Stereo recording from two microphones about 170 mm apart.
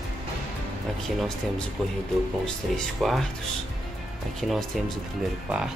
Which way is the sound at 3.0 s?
Centre (ahead or behind).